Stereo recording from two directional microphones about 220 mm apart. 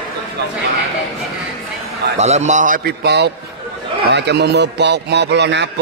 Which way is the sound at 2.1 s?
30° right (ahead or behind).